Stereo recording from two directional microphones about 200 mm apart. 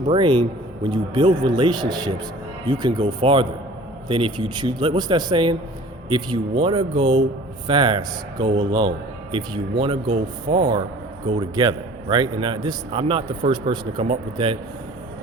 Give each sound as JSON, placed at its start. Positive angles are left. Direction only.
{"t": 0.1, "sound": "a man's voice", "side_deg": -25}